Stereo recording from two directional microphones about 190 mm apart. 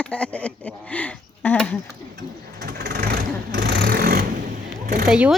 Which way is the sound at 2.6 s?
55° right (ahead or behind).